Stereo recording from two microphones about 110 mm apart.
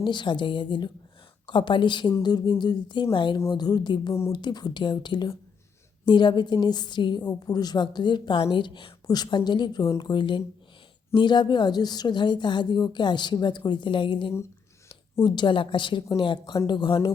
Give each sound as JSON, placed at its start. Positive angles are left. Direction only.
{"t": 0.0, "sound": "a woman's voice", "side_deg": 45}